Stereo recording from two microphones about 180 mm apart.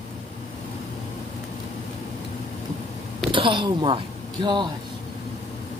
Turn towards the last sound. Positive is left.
turn(degrees=-25)  # may be behind; listen again after turning